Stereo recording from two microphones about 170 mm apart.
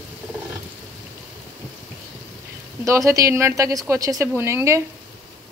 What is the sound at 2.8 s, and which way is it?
Speech, 20° right (ahead or behind).